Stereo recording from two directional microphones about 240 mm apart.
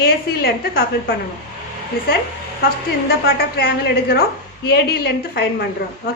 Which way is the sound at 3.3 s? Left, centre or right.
Left.